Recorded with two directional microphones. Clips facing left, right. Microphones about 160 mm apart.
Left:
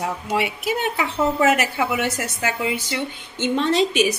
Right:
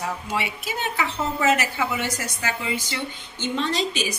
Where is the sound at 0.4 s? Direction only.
60° left (ahead or behind).